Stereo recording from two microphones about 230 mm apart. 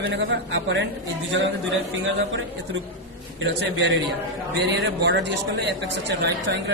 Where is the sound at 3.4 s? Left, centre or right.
Right.